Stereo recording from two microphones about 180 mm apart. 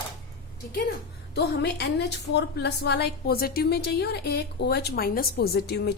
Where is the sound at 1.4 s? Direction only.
65° left (ahead or behind).